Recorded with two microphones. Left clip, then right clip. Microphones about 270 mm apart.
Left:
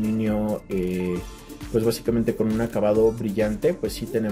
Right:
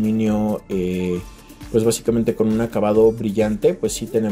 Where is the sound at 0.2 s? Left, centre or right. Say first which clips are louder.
Right 4 dB; centre.